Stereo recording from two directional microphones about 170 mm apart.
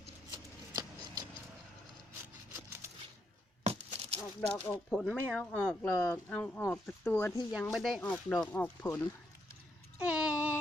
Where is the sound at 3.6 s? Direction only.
40° right (ahead or behind).